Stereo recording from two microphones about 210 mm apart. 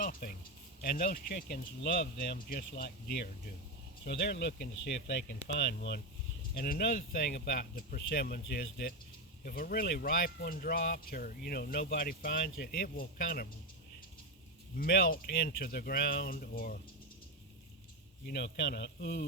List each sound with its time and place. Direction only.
0.0 s speech: 40° left (ahead or behind)
14.8 s speech: 45° left (ahead or behind)
18.3 s speech: 55° left (ahead or behind)